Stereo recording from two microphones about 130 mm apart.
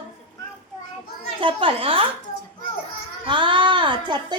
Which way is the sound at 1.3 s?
40° right (ahead or behind).